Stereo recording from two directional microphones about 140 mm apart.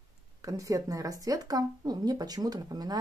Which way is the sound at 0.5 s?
25° right (ahead or behind).